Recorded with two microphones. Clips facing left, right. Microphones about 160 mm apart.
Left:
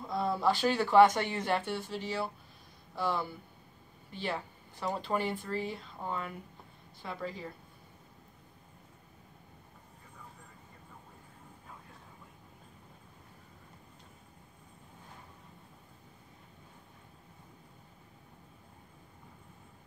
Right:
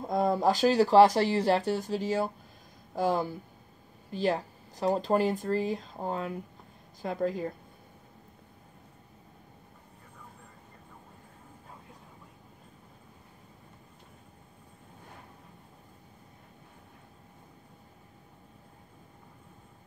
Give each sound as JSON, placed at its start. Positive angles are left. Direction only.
{"t": 0.0, "sound": "a woman's voice", "side_deg": -45}